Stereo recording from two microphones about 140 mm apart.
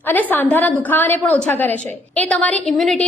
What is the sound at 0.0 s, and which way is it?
A woman's voice, 10° left (ahead or behind).